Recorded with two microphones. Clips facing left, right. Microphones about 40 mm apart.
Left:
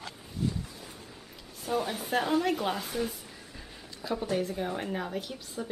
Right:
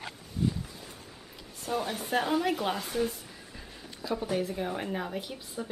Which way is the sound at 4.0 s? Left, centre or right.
Centre.